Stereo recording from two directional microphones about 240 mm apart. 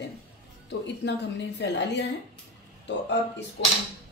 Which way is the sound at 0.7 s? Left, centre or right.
Left.